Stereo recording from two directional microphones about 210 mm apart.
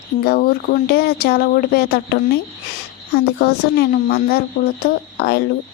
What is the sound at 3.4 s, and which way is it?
A woman's voice, 50° left (ahead or behind).